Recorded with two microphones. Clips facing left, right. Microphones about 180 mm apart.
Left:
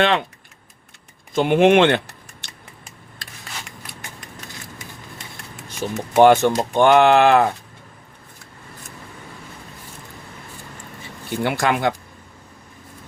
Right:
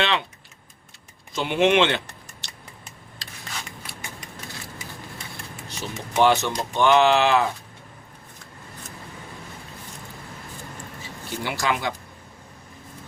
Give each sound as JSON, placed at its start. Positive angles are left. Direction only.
{"t": 1.3, "sound": "speech", "side_deg": 50}
{"t": 2.4, "sound": "scissors", "side_deg": 55}
{"t": 6.1, "sound": "speech", "side_deg": 50}
{"t": 11.0, "sound": "speech", "side_deg": 55}